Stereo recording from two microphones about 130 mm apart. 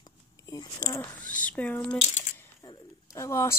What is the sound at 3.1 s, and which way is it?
Speech, 25° left (ahead or behind).